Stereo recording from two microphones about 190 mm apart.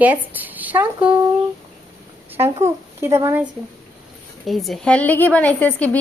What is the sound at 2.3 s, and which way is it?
A child's voice, 10° right (ahead or behind).